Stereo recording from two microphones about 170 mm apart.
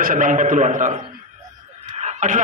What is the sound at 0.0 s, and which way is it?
Speech, 50° right (ahead or behind).